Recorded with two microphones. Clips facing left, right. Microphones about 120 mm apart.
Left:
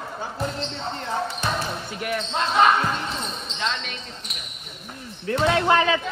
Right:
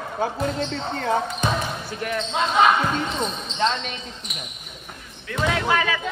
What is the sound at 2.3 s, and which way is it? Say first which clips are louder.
Speech: right 1 dB; centre (ahead or behind).